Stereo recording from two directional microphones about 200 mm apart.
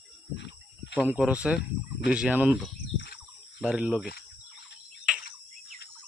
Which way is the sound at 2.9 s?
50° left (ahead or behind).